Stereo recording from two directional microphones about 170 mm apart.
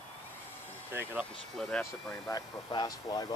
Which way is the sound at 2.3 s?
25° left (ahead or behind).